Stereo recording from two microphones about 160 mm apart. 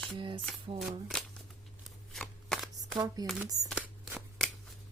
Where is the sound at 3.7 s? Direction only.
5° right (ahead or behind).